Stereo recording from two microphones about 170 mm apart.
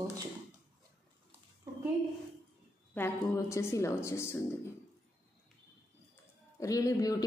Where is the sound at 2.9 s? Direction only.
15° left (ahead or behind).